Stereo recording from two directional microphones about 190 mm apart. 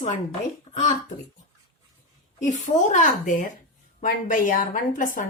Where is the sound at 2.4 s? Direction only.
40° left (ahead or behind).